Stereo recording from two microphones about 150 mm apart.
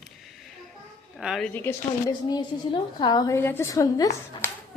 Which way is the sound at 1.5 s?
15° left (ahead or behind).